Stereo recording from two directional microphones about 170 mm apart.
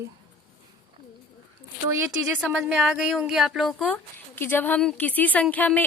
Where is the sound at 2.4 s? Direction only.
5° right (ahead or behind).